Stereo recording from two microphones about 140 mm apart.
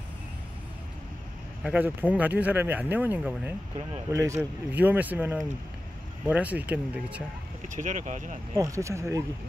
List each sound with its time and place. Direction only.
1.6 s speech: 10° right (ahead or behind)
7.6 s speech: 65° right (ahead or behind)
8.5 s speech: 20° right (ahead or behind)